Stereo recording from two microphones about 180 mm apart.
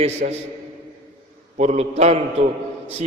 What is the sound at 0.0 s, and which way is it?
Speech, 35° right (ahead or behind).